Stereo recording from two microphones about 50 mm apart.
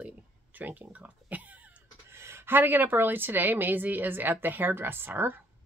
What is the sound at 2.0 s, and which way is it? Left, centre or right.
A woman's voice, right.